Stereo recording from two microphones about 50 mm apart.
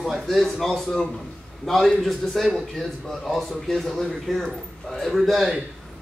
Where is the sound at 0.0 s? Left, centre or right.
Centre.